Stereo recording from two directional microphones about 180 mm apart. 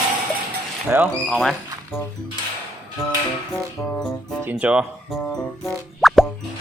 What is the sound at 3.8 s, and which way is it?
Speech, 15° left (ahead or behind).